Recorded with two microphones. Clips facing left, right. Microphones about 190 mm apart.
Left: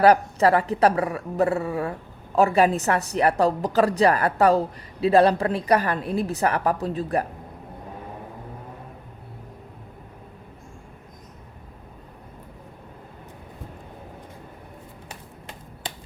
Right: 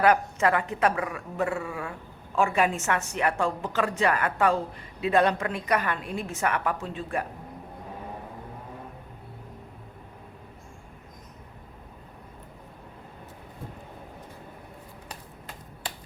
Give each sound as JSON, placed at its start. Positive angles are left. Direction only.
{"t": 0.0, "sound": "speech", "side_deg": 35}